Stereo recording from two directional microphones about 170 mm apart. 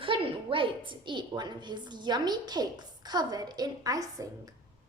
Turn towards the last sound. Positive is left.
turn(degrees=-20)  # may be behind; listen again after turning